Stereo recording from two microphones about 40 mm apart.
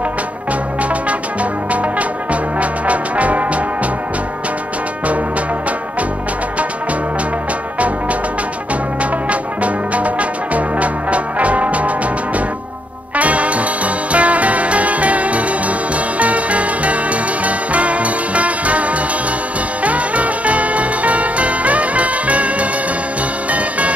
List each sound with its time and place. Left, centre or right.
1.4 s brass instrument: right
2.6 s music: right
9.3 s music: right
13.1 s music: right